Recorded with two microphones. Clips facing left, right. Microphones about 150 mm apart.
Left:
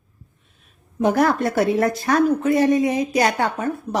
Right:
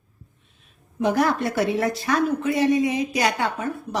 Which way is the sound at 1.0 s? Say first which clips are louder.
Left 3 dB; 45° left (ahead or behind).